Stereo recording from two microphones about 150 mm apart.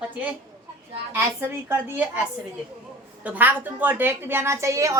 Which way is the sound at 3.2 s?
10° right (ahead or behind).